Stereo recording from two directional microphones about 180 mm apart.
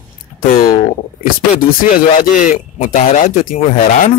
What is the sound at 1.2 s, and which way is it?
Speech, 50° left (ahead or behind).